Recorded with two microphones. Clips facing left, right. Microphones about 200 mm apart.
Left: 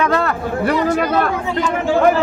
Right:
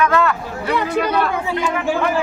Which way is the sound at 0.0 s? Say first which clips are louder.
Right 1 dB; 35° left (ahead or behind).